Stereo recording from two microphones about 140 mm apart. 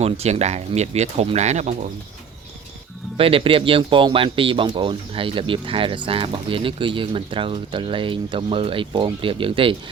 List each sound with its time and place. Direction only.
0.0 s speech: 50° right (ahead or behind)
3.2 s speech: 40° right (ahead or behind)